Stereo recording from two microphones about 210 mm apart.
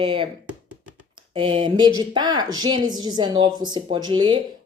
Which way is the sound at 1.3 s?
25° right (ahead or behind).